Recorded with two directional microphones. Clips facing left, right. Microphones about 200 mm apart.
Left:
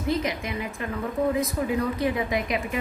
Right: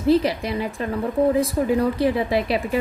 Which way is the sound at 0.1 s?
35° right (ahead or behind).